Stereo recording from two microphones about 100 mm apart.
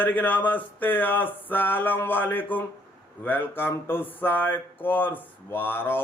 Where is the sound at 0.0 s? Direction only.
15° left (ahead or behind).